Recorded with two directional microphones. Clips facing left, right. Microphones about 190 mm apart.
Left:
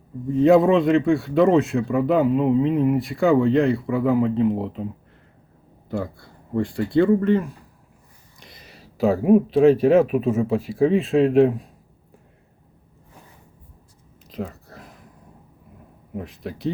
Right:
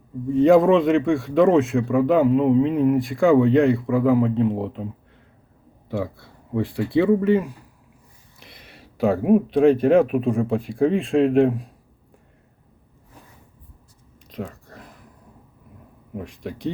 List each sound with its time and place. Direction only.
0.3 s speech: centre (ahead or behind)
14.3 s a sound: centre (ahead or behind)
16.1 s speech: centre (ahead or behind)